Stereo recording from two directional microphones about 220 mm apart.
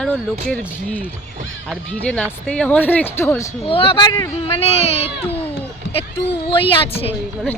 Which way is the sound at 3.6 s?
25° left (ahead or behind).